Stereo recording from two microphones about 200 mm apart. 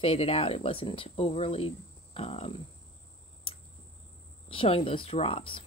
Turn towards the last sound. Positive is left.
turn(degrees=25)  # may be behind; listen again after turning